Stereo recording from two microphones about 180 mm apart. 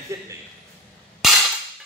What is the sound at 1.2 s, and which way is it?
Cap gun, centre (ahead or behind).